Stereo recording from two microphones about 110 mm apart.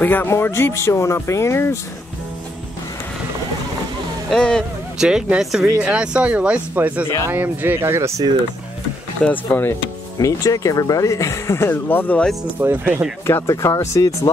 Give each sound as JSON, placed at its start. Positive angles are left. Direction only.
{"t": 0.0, "sound": "speech", "side_deg": 20}
{"t": 4.3, "sound": "speech", "side_deg": 5}
{"t": 4.9, "sound": "speech", "side_deg": -5}
{"t": 9.2, "sound": "speech", "side_deg": 15}
{"t": 10.1, "sound": "speech", "side_deg": 30}
{"t": 12.5, "sound": "speech", "side_deg": -15}
{"t": 13.3, "sound": "speech", "side_deg": 25}